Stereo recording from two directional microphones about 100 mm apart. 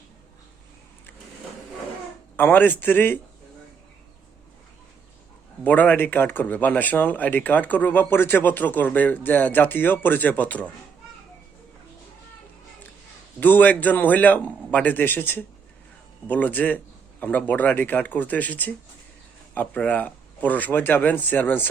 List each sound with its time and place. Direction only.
2.3 s a man's voice: 20° left (ahead or behind)
5.6 s speech: 15° left (ahead or behind)
13.4 s speech: 15° left (ahead or behind)